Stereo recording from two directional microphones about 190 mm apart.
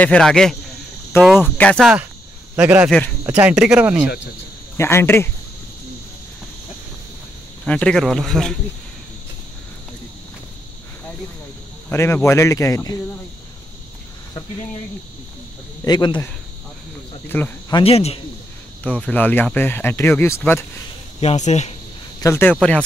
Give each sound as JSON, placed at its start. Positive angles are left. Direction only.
{"t": 0.0, "sound": "speech", "side_deg": 5}
{"t": 2.5, "sound": "speech", "side_deg": -5}
{"t": 4.7, "sound": "speech", "side_deg": 15}
{"t": 7.6, "sound": "speech", "side_deg": 5}
{"t": 11.9, "sound": "speech", "side_deg": 15}
{"t": 15.8, "sound": "speech", "side_deg": 20}
{"t": 17.3, "sound": "speech", "side_deg": 10}
{"t": 17.7, "sound": "speech", "side_deg": 30}
{"t": 18.9, "sound": "speech", "side_deg": 5}
{"t": 21.2, "sound": "speech", "side_deg": 35}
{"t": 22.2, "sound": "speech", "side_deg": 10}